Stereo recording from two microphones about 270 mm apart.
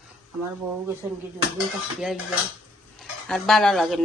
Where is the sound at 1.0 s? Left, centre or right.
Centre.